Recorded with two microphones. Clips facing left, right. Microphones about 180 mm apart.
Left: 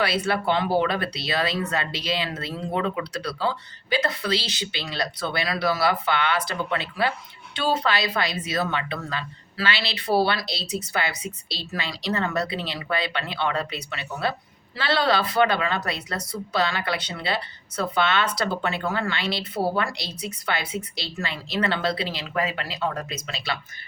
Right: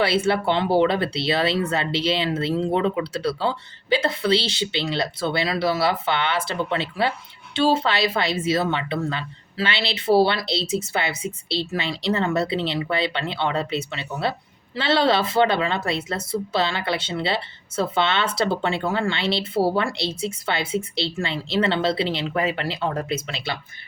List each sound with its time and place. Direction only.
0.0 s speech: 25° right (ahead or behind)